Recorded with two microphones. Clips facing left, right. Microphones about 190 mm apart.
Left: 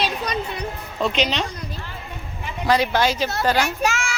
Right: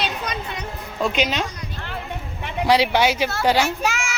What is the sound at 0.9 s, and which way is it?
Speech, centre (ahead or behind).